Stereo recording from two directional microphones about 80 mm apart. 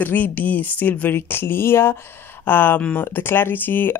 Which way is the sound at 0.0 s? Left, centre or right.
Left.